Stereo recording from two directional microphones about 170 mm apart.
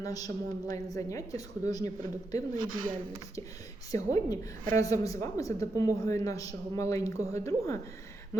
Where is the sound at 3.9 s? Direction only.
20° left (ahead or behind).